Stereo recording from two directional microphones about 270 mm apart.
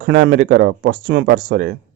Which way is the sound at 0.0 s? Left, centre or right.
Right.